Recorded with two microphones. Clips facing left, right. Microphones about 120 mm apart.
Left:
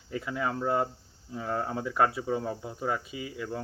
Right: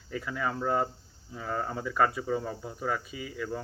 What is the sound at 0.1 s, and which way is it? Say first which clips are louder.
Speech: left 1 dB; 20° left (ahead or behind).